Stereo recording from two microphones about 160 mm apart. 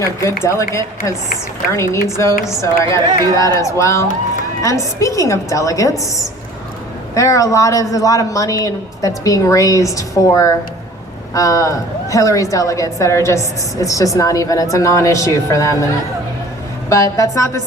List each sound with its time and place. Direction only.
0.7 s speech: 15° left (ahead or behind)
16.9 s speech: 20° left (ahead or behind)